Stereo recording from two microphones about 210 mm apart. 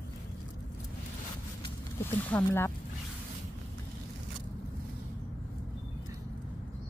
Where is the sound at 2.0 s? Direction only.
10° left (ahead or behind).